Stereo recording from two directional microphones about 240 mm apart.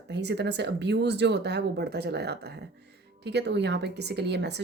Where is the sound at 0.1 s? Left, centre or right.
Right.